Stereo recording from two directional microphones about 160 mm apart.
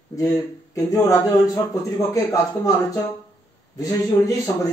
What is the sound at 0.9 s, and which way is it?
Speech, 20° left (ahead or behind).